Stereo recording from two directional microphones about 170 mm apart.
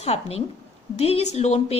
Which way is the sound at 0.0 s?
40° left (ahead or behind).